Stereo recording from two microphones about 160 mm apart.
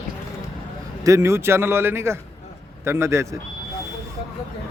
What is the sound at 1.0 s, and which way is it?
A man's voice, 20° right (ahead or behind).